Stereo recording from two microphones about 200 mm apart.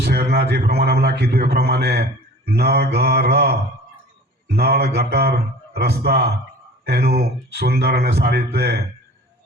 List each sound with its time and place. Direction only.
0.0 s a man's voice: 50° right (ahead or behind)